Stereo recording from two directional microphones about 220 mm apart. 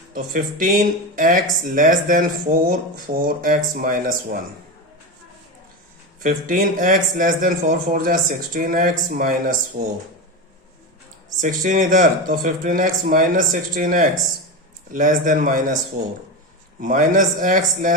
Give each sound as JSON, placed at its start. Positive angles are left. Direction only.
{"t": 0.1, "sound": "speech", "side_deg": -40}
{"t": 6.2, "sound": "speech", "side_deg": -35}
{"t": 11.3, "sound": "speech", "side_deg": -35}
{"t": 16.8, "sound": "speech", "side_deg": -40}